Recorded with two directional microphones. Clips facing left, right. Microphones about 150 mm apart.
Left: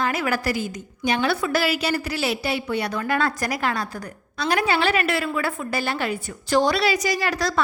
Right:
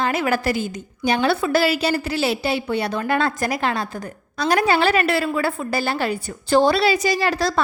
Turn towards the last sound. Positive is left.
turn(degrees=-30)  # may be behind; listen again after turning